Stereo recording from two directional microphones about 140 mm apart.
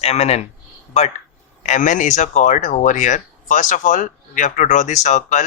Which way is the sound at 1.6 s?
60° left (ahead or behind).